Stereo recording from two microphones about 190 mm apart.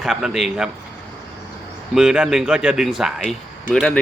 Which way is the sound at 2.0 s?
5° right (ahead or behind).